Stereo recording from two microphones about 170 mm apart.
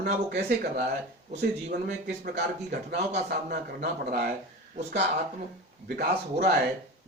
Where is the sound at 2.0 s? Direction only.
65° right (ahead or behind).